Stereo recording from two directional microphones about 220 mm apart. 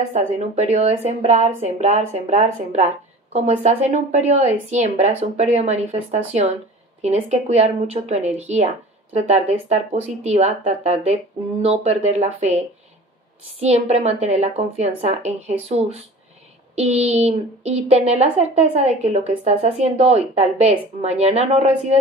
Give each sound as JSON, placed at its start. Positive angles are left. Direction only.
{"t": 0.1, "sound": "a woman's voice", "side_deg": -30}